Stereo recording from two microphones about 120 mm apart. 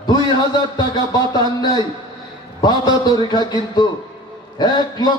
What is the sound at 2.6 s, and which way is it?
A man's voice, 35° left (ahead or behind).